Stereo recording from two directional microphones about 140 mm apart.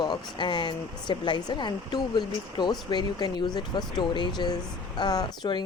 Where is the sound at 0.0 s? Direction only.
30° left (ahead or behind).